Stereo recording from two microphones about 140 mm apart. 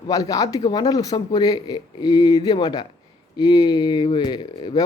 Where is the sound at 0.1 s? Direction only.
25° left (ahead or behind).